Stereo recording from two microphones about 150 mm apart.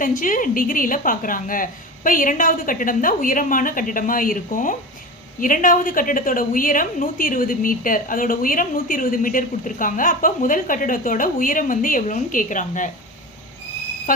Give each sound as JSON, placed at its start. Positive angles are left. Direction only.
{"t": 0.0, "sound": "a woman's voice", "side_deg": 60}